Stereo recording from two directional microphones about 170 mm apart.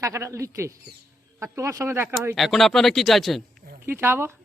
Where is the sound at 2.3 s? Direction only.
Centre (ahead or behind).